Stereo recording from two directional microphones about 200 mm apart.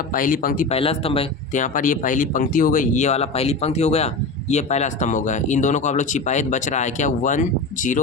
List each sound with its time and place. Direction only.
0.1 s speech: 45° left (ahead or behind)
0.7 s speech: 30° left (ahead or behind)
1.6 s speech: 40° left (ahead or behind)